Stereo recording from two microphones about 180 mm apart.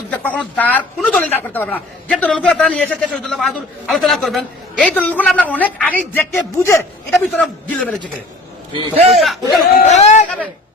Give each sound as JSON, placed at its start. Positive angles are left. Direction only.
{"t": 0.1, "sound": "speech", "side_deg": 10}
{"t": 8.7, "sound": "a man's voice", "side_deg": -25}
{"t": 9.0, "sound": "a man's voice", "side_deg": 0}
{"t": 9.7, "sound": "a sound", "side_deg": 40}